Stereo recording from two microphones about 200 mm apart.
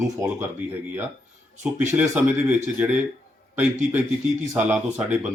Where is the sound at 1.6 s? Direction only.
5° right (ahead or behind).